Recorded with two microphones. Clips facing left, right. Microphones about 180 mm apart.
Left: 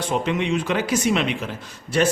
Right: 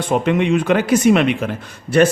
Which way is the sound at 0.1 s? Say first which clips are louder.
Right 7 dB; 55° right (ahead or behind).